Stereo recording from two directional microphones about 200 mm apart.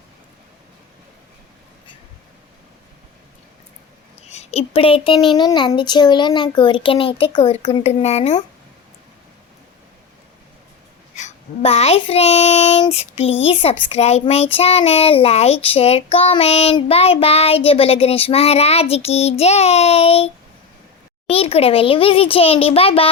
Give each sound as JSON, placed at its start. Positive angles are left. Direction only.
{"t": 4.3, "sound": "speech", "side_deg": 30}
{"t": 11.1, "sound": "child singing", "side_deg": 35}
{"t": 13.4, "sound": "speech", "side_deg": 30}
{"t": 13.9, "sound": "child singing", "side_deg": 30}
{"t": 21.2, "sound": "speech", "side_deg": 30}